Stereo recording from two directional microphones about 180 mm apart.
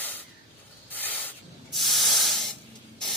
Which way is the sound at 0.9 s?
10° left (ahead or behind).